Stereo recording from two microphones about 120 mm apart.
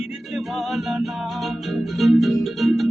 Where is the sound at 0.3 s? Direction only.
Centre (ahead or behind).